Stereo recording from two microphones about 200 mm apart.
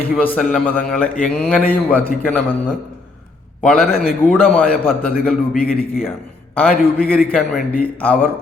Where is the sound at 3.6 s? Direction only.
Centre (ahead or behind).